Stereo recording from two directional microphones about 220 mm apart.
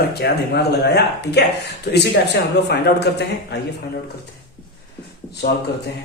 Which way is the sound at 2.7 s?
50° left (ahead or behind).